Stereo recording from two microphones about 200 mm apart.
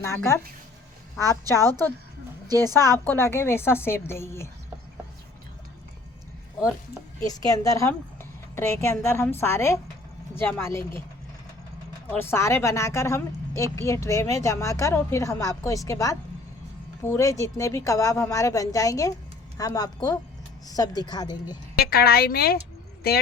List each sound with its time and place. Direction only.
0.0 s a woman's voice: 15° left (ahead or behind)
2.7 s a woman's voice: 15° left (ahead or behind)
7.2 s a woman's voice: 20° left (ahead or behind)
12.0 s a woman's voice: 10° left (ahead or behind)
21.8 s speech: 50° left (ahead or behind)